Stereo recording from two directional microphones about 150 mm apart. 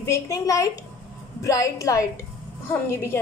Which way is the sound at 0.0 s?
20° left (ahead or behind).